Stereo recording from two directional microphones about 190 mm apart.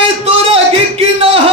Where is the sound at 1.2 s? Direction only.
30° right (ahead or behind).